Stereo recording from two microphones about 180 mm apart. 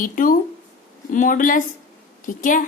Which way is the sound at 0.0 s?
50° left (ahead or behind).